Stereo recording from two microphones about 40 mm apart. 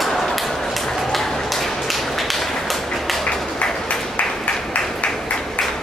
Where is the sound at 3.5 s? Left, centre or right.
Left.